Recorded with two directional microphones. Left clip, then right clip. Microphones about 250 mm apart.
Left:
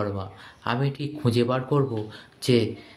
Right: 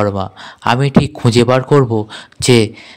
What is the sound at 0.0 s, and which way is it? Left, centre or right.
Speech, right.